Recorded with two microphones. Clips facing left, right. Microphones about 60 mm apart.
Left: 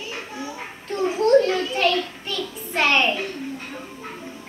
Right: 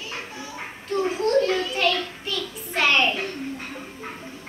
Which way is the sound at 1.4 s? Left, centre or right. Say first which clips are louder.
Left 2 dB; centre.